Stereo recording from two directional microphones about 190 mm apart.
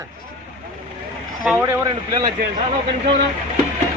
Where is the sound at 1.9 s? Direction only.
25° right (ahead or behind).